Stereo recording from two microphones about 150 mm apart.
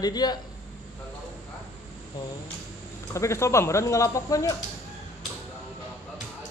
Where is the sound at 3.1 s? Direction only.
20° left (ahead or behind).